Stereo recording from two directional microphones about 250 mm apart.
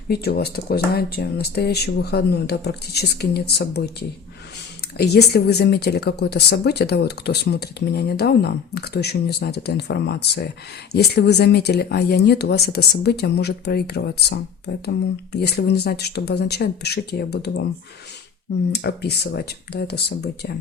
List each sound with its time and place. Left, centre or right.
0.1 s speech: left
4.9 s speech: left
18.7 s speech: left